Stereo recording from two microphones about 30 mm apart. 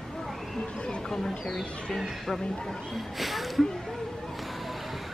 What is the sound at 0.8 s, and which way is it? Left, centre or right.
Chatter, left.